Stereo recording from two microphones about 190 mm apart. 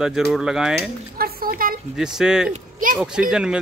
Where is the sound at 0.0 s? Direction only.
Centre (ahead or behind).